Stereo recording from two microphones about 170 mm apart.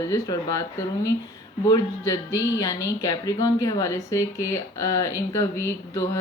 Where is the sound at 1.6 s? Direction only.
20° left (ahead or behind).